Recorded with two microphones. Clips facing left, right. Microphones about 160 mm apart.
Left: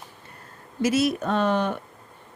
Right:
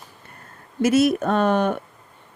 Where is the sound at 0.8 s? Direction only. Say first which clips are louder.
Right 5 dB; 50° right (ahead or behind).